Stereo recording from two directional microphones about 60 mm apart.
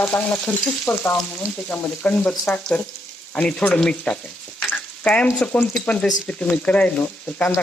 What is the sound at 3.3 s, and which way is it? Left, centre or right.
Speech, centre.